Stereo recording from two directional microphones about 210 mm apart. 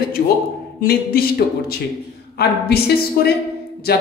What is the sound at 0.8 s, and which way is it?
Speech, 45° left (ahead or behind).